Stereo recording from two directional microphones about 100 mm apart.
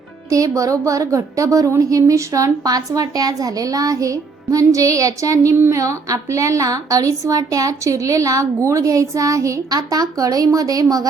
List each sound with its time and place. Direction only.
0.3 s a woman's voice: 35° right (ahead or behind)